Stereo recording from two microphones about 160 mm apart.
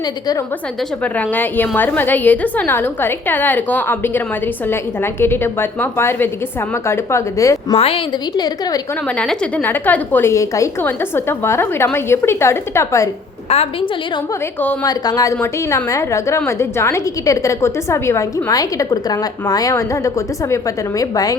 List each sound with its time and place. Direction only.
1.0 s a woman's voice: 10° left (ahead or behind)
7.8 s a woman's voice: 40° left (ahead or behind)
8.4 s a woman's voice: 25° left (ahead or behind)
9.0 s a woman's voice: 5° left (ahead or behind)
13.5 s a woman's voice: 40° left (ahead or behind)
14.8 s a woman's voice: 25° left (ahead or behind)